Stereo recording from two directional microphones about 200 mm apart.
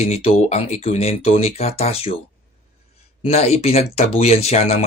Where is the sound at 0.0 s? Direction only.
30° left (ahead or behind).